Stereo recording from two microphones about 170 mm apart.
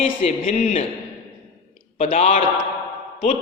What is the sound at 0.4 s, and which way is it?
Speech, 50° left (ahead or behind).